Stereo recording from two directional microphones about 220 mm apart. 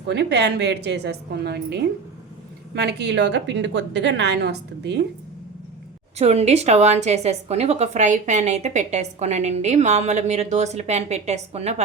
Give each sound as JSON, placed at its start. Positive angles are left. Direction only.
{"t": 0.1, "sound": "a woman's voice", "side_deg": -50}
{"t": 6.1, "sound": "a woman's voice", "side_deg": -30}